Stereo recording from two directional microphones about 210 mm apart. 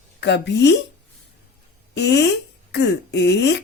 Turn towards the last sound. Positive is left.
turn(degrees=55)  # may be behind; listen again after turning